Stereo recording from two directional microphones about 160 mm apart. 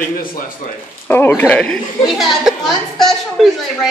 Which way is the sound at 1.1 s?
10° left (ahead or behind).